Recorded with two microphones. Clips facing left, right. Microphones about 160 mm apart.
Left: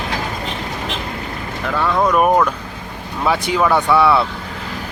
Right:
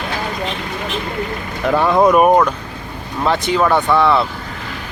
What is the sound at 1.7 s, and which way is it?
Speech, 25° right (ahead or behind).